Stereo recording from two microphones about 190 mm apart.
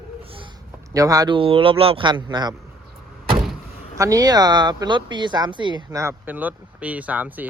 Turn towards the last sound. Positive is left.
turn(degrees=-10)  # may be behind; listen again after turning